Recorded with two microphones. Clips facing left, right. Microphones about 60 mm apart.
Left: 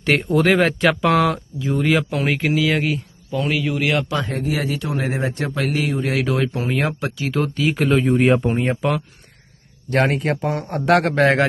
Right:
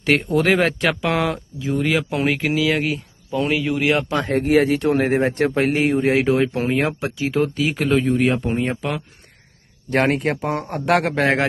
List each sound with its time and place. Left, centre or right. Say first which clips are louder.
0.0 s speech: left 1 dB; centre
3.3 s a man's voice: right 1 dB; centre
4.1 s speech: right 6 dB; right
5.5 s a man's voice: right 4 dB; right
6.7 s a man's voice: right 1 dB; centre
7.2 s speech: right 2 dB; centre
8.0 s speech: left 3 dB; centre
8.4 s speech: left 2 dB; centre
9.9 s a man's voice: even; centre